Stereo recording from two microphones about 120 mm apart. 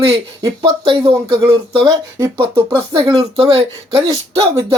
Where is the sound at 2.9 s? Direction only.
50° right (ahead or behind).